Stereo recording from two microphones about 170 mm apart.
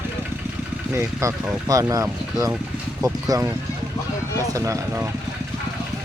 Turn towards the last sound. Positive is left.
turn(degrees=-15)  # may be behind; listen again after turning